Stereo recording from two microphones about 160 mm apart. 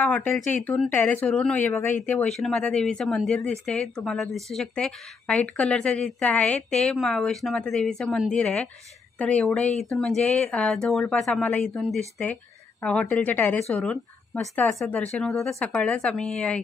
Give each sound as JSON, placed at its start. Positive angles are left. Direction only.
{"t": 0.0, "sound": "speech", "side_deg": 10}
{"t": 1.7, "sound": "speech", "side_deg": 15}
{"t": 2.0, "sound": "a woman's voice", "side_deg": 5}